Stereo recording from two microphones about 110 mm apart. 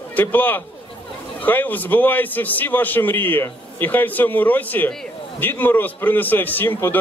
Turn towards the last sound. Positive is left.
turn(degrees=15)  # may be behind; listen again after turning